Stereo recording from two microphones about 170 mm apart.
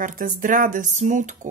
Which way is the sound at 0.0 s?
50° right (ahead or behind).